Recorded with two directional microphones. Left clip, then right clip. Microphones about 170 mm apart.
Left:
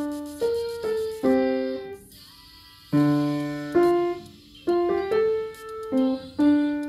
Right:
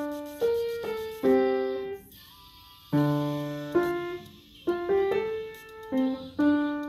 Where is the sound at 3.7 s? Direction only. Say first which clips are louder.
Left 7 dB; 40° left (ahead or behind).